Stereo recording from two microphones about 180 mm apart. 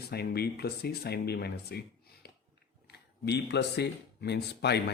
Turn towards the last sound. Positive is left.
turn(degrees=65)  # may be behind; listen again after turning